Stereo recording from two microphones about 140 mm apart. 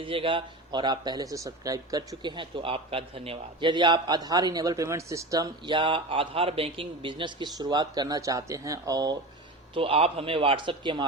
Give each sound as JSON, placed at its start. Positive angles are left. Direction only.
{"t": 0.0, "sound": "speech", "side_deg": -40}
{"t": 9.7, "sound": "speech", "side_deg": -40}